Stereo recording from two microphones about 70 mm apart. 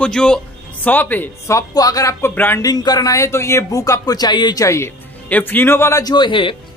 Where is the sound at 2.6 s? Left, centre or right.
Left.